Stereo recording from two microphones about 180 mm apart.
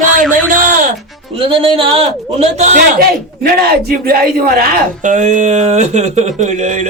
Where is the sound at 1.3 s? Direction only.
30° right (ahead or behind).